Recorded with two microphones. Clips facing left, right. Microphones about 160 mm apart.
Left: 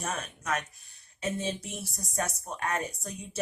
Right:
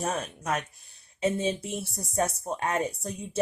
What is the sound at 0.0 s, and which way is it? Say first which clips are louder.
Speech: right 5 dB; 30° right (ahead or behind).